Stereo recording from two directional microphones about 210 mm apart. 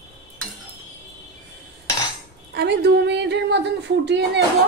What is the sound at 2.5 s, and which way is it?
Speech, 50° right (ahead or behind).